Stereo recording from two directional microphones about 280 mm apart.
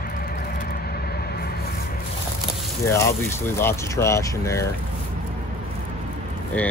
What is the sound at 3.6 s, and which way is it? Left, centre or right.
Speech, centre.